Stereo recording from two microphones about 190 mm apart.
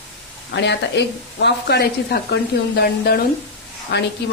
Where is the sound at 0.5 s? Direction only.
65° left (ahead or behind).